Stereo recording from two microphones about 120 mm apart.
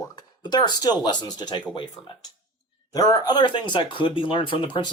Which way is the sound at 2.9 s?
30° left (ahead or behind).